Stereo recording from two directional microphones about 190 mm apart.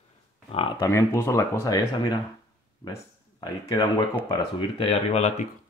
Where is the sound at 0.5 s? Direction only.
30° left (ahead or behind).